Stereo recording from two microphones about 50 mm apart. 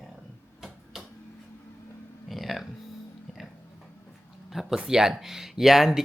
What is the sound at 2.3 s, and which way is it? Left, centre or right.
Music, centre.